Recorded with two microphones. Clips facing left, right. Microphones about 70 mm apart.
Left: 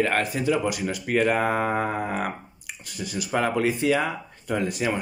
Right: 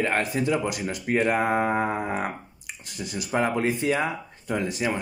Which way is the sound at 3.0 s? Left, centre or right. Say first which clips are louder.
Left 1 dB; centre.